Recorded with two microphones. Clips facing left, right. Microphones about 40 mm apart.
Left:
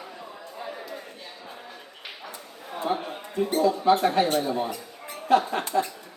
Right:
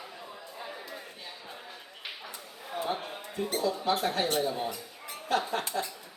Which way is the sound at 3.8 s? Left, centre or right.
Centre.